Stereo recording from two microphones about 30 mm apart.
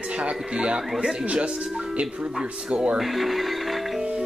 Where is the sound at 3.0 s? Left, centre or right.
Centre.